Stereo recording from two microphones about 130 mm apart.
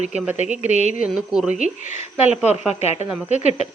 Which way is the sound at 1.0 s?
5° right (ahead or behind).